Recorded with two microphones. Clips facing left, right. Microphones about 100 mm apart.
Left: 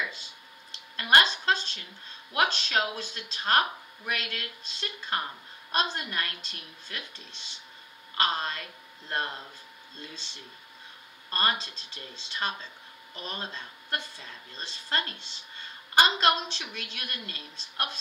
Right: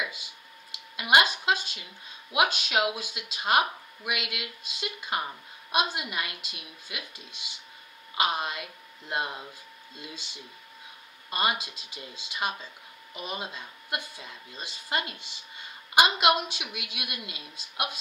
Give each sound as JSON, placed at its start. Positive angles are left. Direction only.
{"t": 0.0, "sound": "speech", "side_deg": -10}